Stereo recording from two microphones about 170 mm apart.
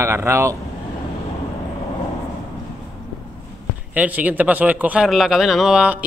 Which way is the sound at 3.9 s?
10° right (ahead or behind).